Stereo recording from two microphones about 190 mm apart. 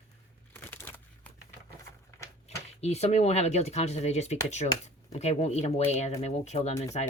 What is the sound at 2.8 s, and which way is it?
Speech, 35° left (ahead or behind).